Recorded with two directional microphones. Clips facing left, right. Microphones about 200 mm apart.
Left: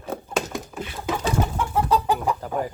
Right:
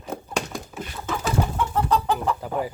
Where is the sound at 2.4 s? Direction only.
5° right (ahead or behind).